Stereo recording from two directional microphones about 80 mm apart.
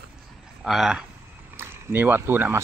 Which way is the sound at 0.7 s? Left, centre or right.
Centre.